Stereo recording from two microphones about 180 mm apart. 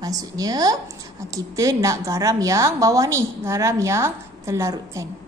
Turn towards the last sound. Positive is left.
turn(degrees=-15)  # may be behind; listen again after turning